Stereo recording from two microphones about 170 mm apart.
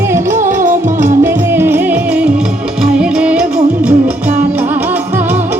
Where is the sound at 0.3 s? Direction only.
50° right (ahead or behind).